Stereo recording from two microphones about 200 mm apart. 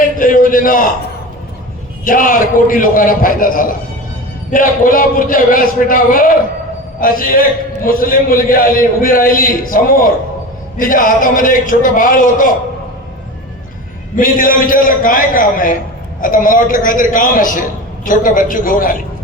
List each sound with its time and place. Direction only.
0.2 s a sound: 45° left (ahead or behind)
2.0 s a man's voice: 45° left (ahead or behind)
14.2 s a man's voice: 45° left (ahead or behind)